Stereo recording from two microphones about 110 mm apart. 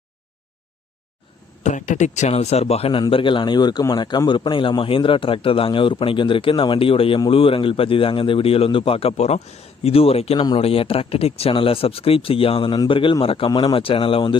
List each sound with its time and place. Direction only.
1.6 s a man's voice: 90° left; by 3.0 s 65° left (ahead or behind)
3.1 s a man's voice: 50° left (ahead or behind)